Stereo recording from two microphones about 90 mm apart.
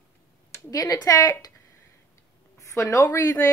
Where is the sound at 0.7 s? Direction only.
45° left (ahead or behind).